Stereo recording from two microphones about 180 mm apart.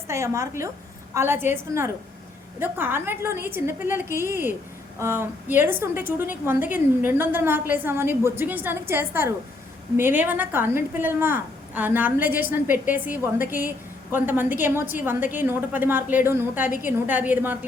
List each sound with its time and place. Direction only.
0.1 s a woman's voice: 15° right (ahead or behind)